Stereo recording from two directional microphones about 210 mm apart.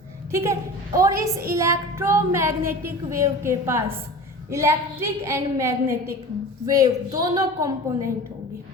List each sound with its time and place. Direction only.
0.3 s a woman's voice: 10° right (ahead or behind)